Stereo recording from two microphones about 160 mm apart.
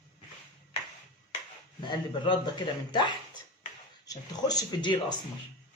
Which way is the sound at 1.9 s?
30° left (ahead or behind).